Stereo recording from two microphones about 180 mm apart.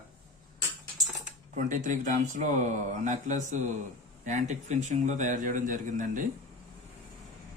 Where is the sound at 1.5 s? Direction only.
45° right (ahead or behind).